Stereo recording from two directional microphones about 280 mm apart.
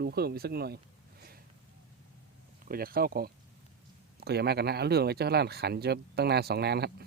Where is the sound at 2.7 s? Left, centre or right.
Right.